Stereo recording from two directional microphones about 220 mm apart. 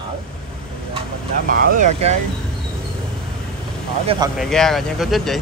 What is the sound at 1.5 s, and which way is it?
Speech, 40° right (ahead or behind).